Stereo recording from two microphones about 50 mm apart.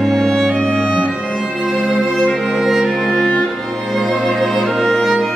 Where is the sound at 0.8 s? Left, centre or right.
Right.